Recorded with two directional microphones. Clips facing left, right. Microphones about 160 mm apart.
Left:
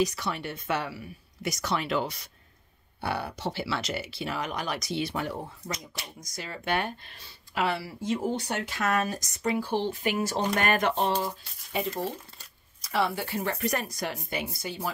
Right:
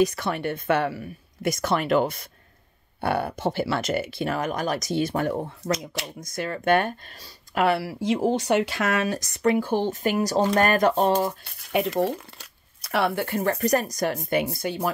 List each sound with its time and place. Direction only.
0.0 s speech: 55° right (ahead or behind)
5.7 s speech: 90° right
6.1 s speech: 55° right (ahead or behind)
7.6 s speech: 65° right (ahead or behind)